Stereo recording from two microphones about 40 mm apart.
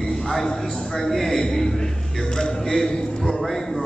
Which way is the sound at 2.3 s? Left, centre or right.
Centre.